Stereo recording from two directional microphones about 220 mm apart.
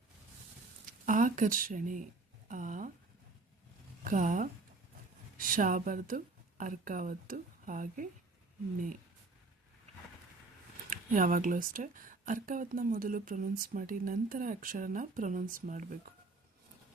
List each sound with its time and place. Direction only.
1.0 s speech: 35° right (ahead or behind)
2.5 s a sound: 35° right (ahead or behind)
4.0 s a woman's voice: 35° right (ahead or behind)
10.8 s speech: 35° right (ahead or behind)